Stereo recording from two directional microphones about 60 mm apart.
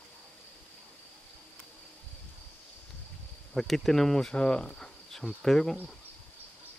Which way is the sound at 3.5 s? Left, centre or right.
Centre.